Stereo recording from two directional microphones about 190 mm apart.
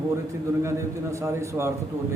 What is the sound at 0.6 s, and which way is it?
A man's voice, 15° right (ahead or behind).